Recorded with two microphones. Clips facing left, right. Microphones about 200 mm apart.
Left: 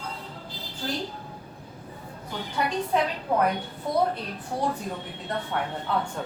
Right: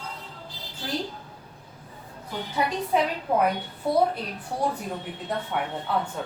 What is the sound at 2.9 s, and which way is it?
Speech, 5° right (ahead or behind).